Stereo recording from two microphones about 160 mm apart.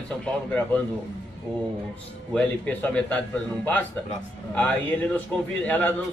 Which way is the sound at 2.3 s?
10° left (ahead or behind).